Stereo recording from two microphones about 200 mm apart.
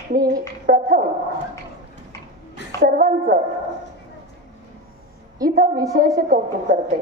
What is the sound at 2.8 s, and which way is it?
Speech, 45° right (ahead or behind).